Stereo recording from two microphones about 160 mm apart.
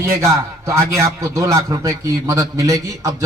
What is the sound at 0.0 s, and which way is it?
A man's voice, 15° right (ahead or behind).